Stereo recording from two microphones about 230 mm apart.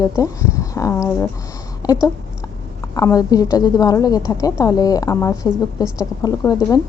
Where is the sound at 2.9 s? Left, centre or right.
Centre.